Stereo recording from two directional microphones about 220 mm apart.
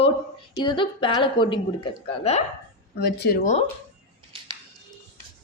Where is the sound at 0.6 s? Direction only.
20° left (ahead or behind).